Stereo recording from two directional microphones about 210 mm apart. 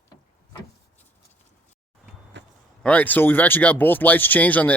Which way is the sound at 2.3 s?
60° right (ahead or behind).